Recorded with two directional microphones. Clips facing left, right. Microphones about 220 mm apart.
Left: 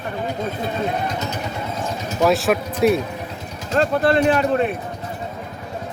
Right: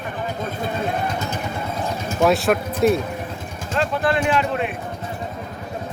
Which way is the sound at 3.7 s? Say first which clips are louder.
Left 4 dB; 40° left (ahead or behind).